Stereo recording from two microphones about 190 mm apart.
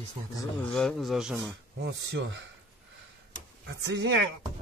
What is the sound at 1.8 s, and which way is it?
Speech, 65° right (ahead or behind).